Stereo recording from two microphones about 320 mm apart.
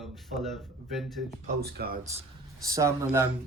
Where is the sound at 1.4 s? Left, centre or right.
Right.